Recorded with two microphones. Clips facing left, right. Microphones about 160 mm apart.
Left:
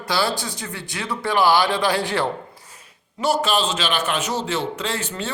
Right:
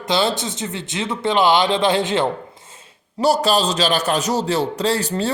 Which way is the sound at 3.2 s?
35° right (ahead or behind).